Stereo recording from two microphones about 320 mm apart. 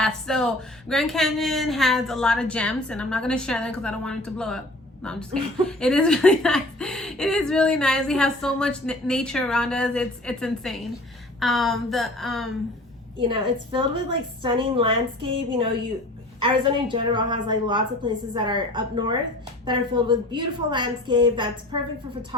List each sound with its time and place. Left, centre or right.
0.0 s speech: centre
13.1 s a woman's voice: centre